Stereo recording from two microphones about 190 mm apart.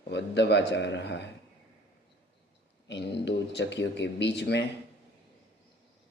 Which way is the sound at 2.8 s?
65° left (ahead or behind).